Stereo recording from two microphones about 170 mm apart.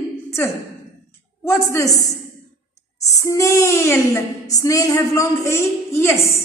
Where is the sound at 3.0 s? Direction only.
20° left (ahead or behind).